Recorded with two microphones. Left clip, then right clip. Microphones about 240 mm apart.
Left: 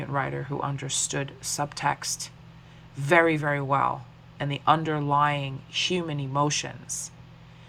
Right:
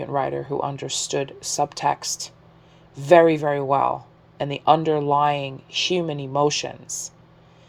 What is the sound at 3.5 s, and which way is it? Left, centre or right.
Speech, right.